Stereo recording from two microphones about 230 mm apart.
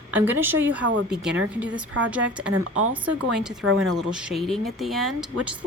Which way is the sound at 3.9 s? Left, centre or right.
Centre.